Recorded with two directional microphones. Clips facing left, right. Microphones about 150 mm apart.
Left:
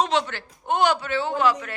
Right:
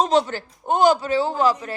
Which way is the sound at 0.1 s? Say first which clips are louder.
Right 5 dB; 40° right (ahead or behind).